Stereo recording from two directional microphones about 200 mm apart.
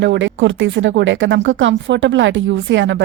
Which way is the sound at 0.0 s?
65° right (ahead or behind).